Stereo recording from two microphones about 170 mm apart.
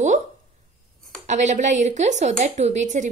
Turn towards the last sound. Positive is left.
turn(degrees=-45)  # may be behind; listen again after turning